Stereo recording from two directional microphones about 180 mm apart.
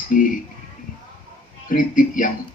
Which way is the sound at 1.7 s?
50° left (ahead or behind).